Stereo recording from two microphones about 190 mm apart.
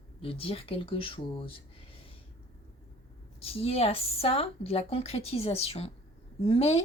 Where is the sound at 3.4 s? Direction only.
30° left (ahead or behind).